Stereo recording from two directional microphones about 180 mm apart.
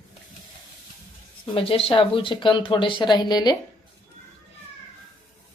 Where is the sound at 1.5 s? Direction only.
30° left (ahead or behind).